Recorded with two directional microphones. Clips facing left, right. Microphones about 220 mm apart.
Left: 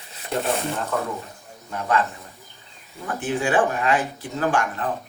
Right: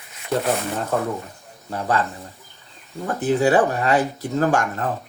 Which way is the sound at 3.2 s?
40° right (ahead or behind).